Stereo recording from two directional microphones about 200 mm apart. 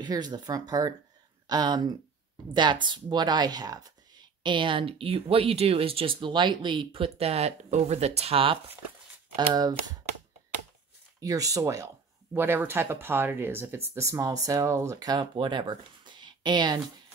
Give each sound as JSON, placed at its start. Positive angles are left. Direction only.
{"t": 0.0, "sound": "speech", "side_deg": -20}
{"t": 11.1, "sound": "speech", "side_deg": -20}